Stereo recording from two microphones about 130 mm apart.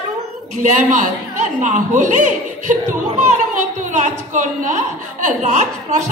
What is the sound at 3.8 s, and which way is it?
Speech, 80° right.